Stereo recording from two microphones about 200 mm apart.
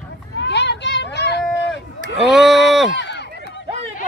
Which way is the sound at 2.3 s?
Centre (ahead or behind).